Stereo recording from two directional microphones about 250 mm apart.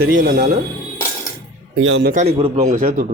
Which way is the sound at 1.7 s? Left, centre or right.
Right.